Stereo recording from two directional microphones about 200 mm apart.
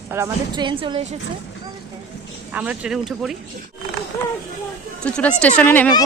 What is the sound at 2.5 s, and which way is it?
Speech, 5° right (ahead or behind).